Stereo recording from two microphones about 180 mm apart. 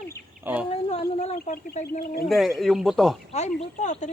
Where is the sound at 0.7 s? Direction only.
35° left (ahead or behind).